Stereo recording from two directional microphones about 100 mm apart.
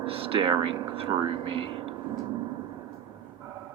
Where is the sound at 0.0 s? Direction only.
65° right (ahead or behind).